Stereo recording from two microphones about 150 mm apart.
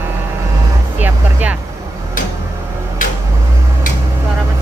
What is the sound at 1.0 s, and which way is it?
Music, 10° right (ahead or behind).